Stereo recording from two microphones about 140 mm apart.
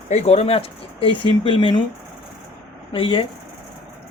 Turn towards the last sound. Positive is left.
turn(degrees=40)  # may be behind; listen again after turning